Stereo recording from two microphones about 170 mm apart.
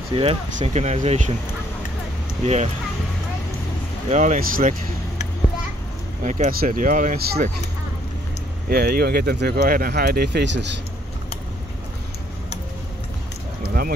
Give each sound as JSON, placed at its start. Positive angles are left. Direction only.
{"t": 0.1, "sound": "speech", "side_deg": -35}
{"t": 0.6, "sound": "speech", "side_deg": -45}
{"t": 2.4, "sound": "speech", "side_deg": -40}
{"t": 4.1, "sound": "speech", "side_deg": -45}
{"t": 6.2, "sound": "speech", "side_deg": -45}
{"t": 8.6, "sound": "speech", "side_deg": -60}